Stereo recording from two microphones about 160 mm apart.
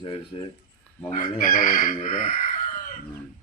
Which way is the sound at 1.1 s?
55° left (ahead or behind).